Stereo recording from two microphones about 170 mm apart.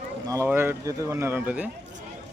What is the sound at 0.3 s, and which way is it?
Speech, 15° right (ahead or behind).